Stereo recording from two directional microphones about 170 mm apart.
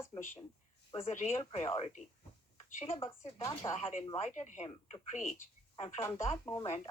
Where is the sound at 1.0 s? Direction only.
45° left (ahead or behind).